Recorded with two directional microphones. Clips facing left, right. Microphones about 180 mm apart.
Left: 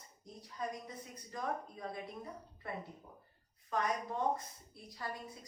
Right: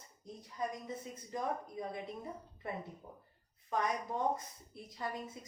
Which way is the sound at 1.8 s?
20° right (ahead or behind).